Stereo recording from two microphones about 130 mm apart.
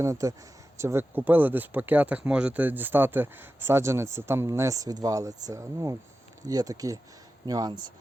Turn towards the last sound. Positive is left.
turn(degrees=-35)  # may be behind; listen again after turning